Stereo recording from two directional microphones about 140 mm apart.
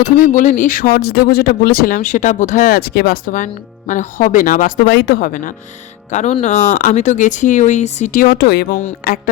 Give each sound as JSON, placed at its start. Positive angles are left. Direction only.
{"t": 0.2, "sound": "speech", "side_deg": 70}
{"t": 6.1, "sound": "speech", "side_deg": 60}